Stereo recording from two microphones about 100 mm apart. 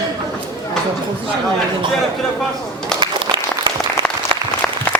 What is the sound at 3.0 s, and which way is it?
Applause, 50° right (ahead or behind).